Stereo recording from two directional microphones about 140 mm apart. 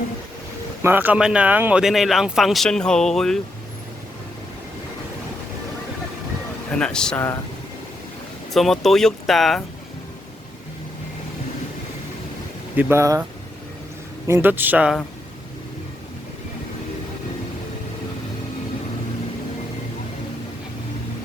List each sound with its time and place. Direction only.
0.8 s speech: 15° right (ahead or behind); by 3.4 s 5° left (ahead or behind)
6.7 s speech: 5° left (ahead or behind)
8.5 s speech: centre (ahead or behind)
12.7 s speech: 15° right (ahead or behind)
14.3 s a man's voice: 15° right (ahead or behind)